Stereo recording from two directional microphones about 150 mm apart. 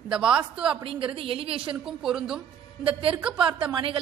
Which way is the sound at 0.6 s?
35° right (ahead or behind).